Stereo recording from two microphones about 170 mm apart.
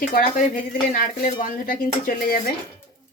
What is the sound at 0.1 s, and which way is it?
Speech, 55° left (ahead or behind).